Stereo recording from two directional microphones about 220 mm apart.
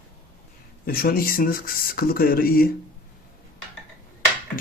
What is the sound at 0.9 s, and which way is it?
Speech, 40° left (ahead or behind).